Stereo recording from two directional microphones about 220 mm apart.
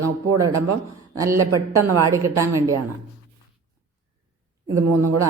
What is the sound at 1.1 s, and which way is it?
A woman's voice, 15° right (ahead or behind).